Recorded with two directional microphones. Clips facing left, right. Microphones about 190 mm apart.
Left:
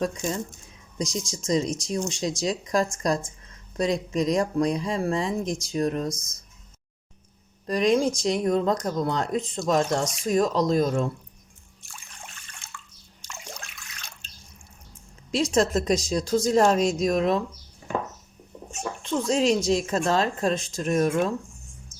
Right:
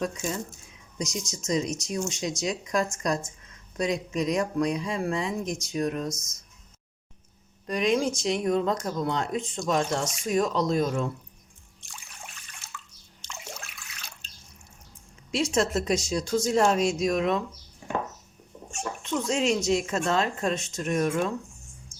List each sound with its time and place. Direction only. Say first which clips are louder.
0.9 s speech: left 3 dB; 30° left (ahead or behind)
7.7 s speech: left 3 dB; 35° left (ahead or behind)
11.9 s trickle: even; 5° right (ahead or behind)
13.2 s water: even; centre (ahead or behind)
15.3 s speech: left 3 dB; 35° left (ahead or behind)
18.8 s speech: left 2 dB; 35° left (ahead or behind)